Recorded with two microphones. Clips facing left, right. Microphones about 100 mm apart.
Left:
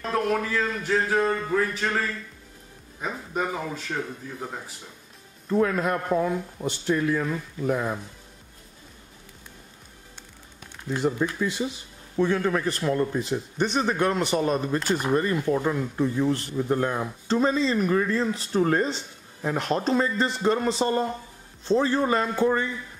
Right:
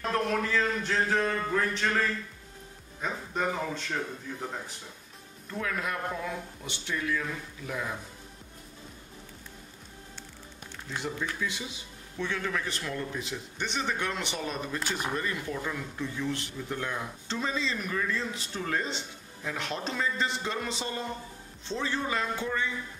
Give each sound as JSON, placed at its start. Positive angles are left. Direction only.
{"t": 0.1, "sound": "speech", "side_deg": 5}
{"t": 5.5, "sound": "speech", "side_deg": 40}
{"t": 11.0, "sound": "speech", "side_deg": 40}